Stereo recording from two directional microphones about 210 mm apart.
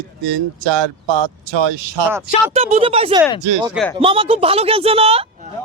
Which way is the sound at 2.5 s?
30° right (ahead or behind).